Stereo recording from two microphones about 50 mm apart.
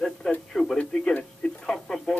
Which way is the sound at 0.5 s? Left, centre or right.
Centre.